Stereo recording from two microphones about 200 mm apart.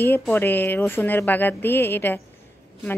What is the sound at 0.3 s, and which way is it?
A woman's voice, 10° left (ahead or behind).